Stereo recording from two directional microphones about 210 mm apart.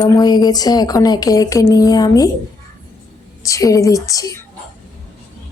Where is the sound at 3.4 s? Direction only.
15° left (ahead or behind).